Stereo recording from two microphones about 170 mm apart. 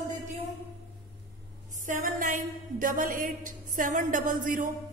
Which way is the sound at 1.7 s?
50° right (ahead or behind).